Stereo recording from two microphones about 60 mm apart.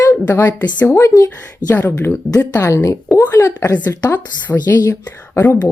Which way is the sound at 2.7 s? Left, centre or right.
Left.